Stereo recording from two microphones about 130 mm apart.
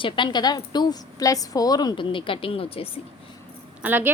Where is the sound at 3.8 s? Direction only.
15° right (ahead or behind).